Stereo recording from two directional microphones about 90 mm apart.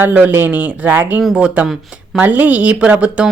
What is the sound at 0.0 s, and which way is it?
A woman's voice, 20° right (ahead or behind).